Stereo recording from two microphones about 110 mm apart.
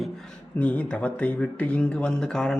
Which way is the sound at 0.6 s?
15° left (ahead or behind).